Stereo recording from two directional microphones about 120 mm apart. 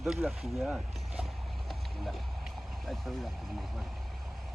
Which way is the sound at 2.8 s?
Centre (ahead or behind).